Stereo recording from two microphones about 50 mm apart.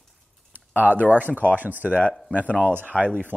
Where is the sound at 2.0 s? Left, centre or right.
Left.